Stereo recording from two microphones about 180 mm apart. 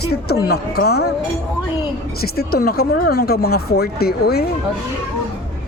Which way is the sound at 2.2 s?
60° left (ahead or behind).